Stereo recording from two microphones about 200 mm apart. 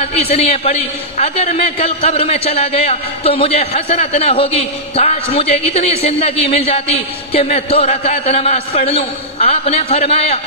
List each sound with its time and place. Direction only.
0.0 s a man's voice: 30° left (ahead or behind)